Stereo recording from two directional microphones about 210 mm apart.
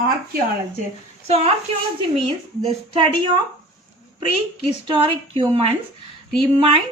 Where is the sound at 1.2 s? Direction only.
30° right (ahead or behind).